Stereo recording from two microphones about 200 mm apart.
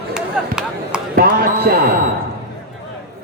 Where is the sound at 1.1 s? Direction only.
50° right (ahead or behind).